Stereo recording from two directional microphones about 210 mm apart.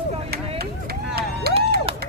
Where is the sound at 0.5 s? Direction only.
50° right (ahead or behind).